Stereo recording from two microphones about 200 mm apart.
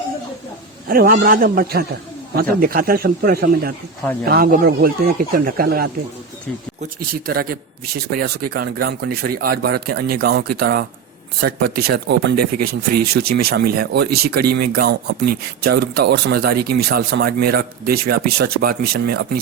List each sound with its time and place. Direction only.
0.9 s a man's voice: 50° right (ahead or behind)
7.3 s a man's voice: 50° right (ahead or behind)